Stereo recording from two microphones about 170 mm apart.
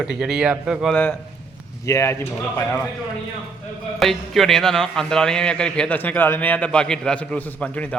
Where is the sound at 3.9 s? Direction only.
Centre (ahead or behind).